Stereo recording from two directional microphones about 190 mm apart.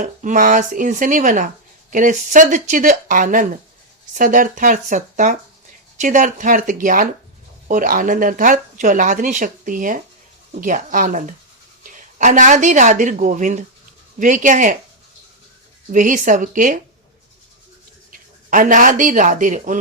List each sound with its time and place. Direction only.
0.0 s a woman's voice: 40° right (ahead or behind)
15.9 s speech: 45° right (ahead or behind)
18.1 s speech: 45° right (ahead or behind)